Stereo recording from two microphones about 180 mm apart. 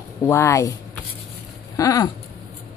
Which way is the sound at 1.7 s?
20° left (ahead or behind).